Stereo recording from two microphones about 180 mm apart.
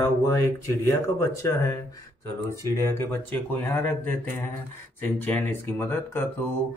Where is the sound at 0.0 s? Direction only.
15° left (ahead or behind).